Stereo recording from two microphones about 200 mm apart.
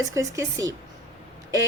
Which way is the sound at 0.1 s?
15° right (ahead or behind).